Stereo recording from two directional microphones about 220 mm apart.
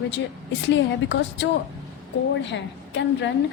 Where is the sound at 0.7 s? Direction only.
55° left (ahead or behind).